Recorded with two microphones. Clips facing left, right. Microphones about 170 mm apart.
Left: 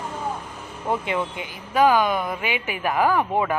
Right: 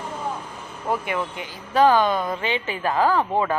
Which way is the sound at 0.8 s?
20° left (ahead or behind).